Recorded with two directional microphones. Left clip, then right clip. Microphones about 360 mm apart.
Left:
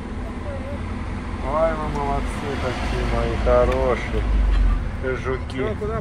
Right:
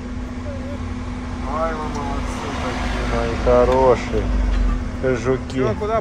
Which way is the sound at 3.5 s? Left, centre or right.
Centre.